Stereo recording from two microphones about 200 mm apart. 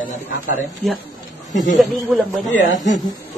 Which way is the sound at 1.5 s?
Centre (ahead or behind).